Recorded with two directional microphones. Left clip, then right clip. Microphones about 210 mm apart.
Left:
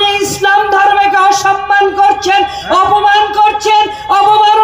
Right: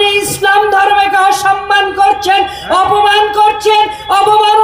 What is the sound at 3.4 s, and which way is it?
Music, 25° right (ahead or behind).